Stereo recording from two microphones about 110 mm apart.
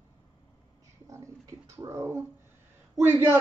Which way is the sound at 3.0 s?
20° right (ahead or behind).